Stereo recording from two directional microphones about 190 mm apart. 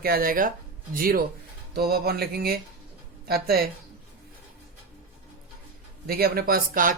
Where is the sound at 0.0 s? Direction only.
50° right (ahead or behind).